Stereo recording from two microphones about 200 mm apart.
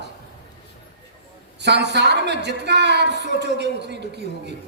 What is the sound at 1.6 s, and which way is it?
A woman's voice, 60° right (ahead or behind).